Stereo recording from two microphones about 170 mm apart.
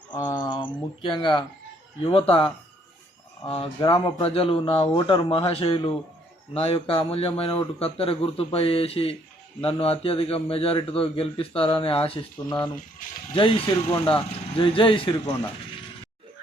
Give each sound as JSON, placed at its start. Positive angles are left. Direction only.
{"t": 0.1, "sound": "a man's voice", "side_deg": 25}
{"t": 13.9, "sound": "a man's voice", "side_deg": 30}